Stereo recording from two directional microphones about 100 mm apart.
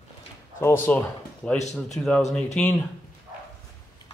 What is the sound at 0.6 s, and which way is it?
Speech, 25° left (ahead or behind).